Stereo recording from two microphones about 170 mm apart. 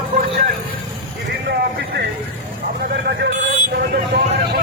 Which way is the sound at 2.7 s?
90° right.